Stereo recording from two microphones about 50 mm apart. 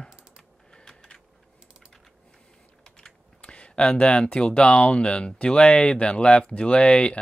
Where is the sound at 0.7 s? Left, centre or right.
Centre.